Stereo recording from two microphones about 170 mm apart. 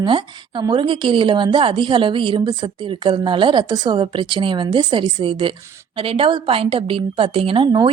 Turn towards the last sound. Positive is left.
turn(degrees=-30)  # may be behind; listen again after turning